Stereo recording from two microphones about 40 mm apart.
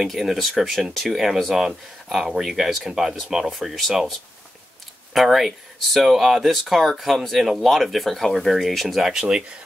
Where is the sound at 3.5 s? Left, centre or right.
Centre.